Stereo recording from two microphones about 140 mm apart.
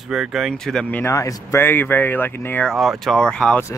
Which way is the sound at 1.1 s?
20° left (ahead or behind).